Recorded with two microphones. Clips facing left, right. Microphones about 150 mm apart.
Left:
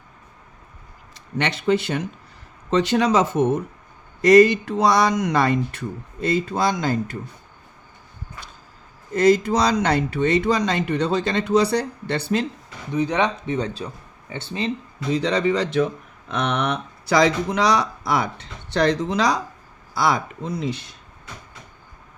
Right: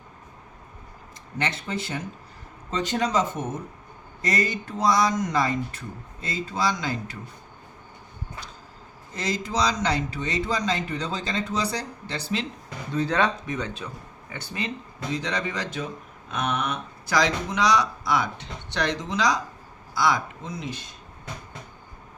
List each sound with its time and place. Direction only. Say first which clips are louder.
1.4 s speech: left 9 dB; 75° left (ahead or behind); by 7.2 s 50° left (ahead or behind)
9.1 s speech: left 11 dB; 55° left (ahead or behind)
12.9 s speech: left 3 dB; 15° left (ahead or behind)
13.6 s speech: left 5 dB; 30° left (ahead or behind)
15.1 s speech: left 9 dB; 65° left (ahead or behind)